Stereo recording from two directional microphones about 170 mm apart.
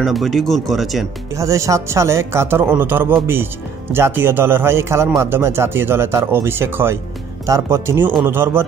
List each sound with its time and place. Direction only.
0.0 s speech: centre (ahead or behind)
1.3 s speech: 20° right (ahead or behind)